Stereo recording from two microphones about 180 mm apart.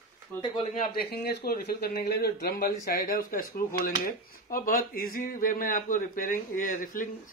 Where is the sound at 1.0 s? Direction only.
60° left (ahead or behind).